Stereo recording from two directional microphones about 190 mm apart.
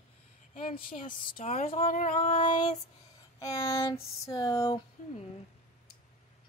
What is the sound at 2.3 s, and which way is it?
Speech, 25° left (ahead or behind).